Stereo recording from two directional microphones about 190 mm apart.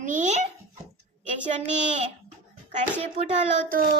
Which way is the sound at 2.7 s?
40° right (ahead or behind).